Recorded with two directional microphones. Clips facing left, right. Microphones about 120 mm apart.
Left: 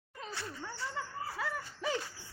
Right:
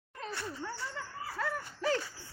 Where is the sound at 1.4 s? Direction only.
10° left (ahead or behind).